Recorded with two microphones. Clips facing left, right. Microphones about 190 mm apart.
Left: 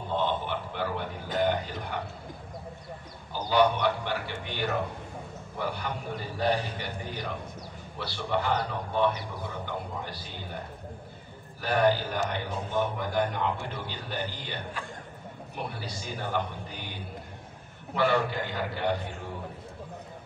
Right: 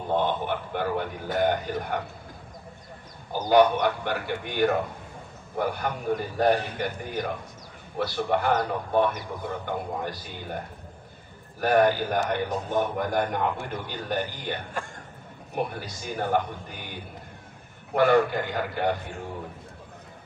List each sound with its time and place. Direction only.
0.1 s a sound: 50° right (ahead or behind)
1.4 s a man's voice: 50° right (ahead or behind)
3.3 s a man's voice: 45° right (ahead or behind)
11.6 s a man's voice: 50° right (ahead or behind)
17.9 s a man's voice: 50° right (ahead or behind)